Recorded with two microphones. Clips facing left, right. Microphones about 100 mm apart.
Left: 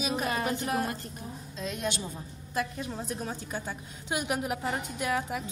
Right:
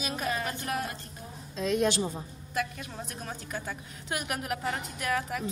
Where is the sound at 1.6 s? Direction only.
90° right.